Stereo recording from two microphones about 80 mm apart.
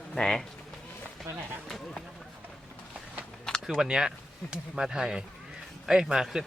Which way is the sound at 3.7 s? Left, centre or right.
Centre.